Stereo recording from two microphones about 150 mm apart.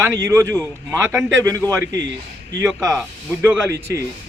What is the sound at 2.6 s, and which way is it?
Speech, centre (ahead or behind).